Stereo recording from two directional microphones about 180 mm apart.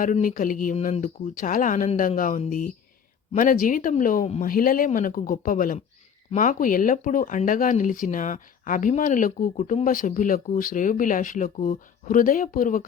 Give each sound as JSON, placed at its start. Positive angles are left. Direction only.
{"t": 0.0, "sound": "speech", "side_deg": 50}